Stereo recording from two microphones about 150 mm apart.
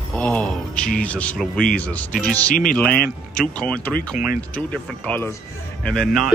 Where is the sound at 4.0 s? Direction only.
65° left (ahead or behind).